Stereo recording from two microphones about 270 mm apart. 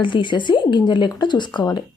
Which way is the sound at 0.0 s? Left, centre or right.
Centre.